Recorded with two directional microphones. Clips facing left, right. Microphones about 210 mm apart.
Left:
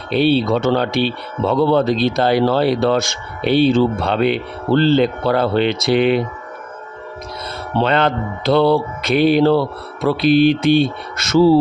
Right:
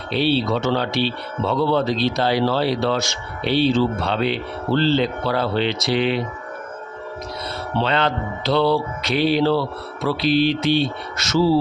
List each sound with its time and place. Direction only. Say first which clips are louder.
0.1 s speech: left 5 dB; 55° left (ahead or behind)
7.8 s speech: left 5 dB; 50° left (ahead or behind)